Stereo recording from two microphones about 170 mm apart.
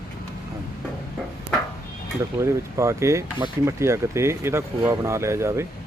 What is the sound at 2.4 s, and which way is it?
Speech, 15° right (ahead or behind).